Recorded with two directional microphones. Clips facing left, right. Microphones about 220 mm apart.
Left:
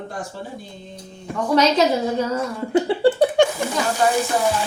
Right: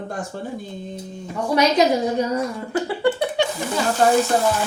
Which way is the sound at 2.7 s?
25° left (ahead or behind).